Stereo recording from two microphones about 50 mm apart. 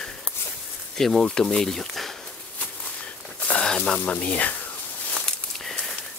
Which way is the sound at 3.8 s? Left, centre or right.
Left.